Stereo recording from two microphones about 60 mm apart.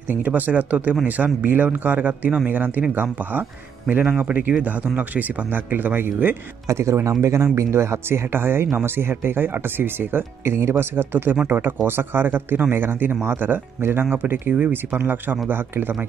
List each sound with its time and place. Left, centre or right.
0.1 s speech: right
6.7 s speech: right